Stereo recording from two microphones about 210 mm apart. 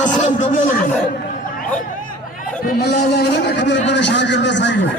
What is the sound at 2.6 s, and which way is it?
A man's voice, 50° left (ahead or behind).